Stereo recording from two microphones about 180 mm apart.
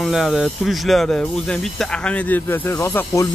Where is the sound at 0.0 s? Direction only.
Centre (ahead or behind).